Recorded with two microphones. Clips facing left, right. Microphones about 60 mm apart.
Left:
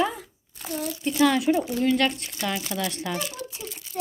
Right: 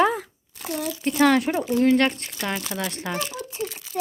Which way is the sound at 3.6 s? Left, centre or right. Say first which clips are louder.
Right 4 dB; right.